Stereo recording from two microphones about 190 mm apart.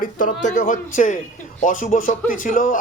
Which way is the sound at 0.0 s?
45° left (ahead or behind).